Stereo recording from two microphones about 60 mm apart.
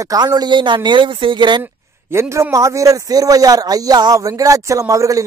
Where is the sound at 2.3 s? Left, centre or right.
Right.